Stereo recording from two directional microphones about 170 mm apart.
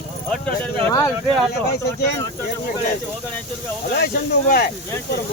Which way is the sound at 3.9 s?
60° left (ahead or behind).